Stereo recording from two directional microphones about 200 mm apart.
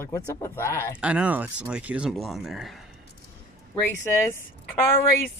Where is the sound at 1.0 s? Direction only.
5° right (ahead or behind).